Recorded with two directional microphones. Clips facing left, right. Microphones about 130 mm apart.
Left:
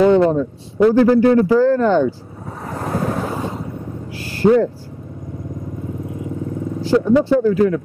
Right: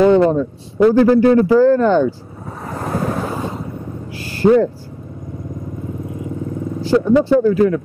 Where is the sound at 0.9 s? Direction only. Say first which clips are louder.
Right 1 dB; 15° right (ahead or behind).